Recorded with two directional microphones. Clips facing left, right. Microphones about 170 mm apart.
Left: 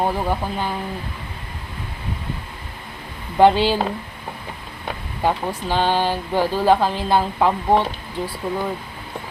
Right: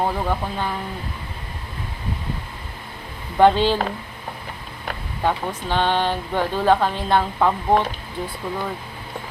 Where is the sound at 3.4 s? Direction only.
5° left (ahead or behind).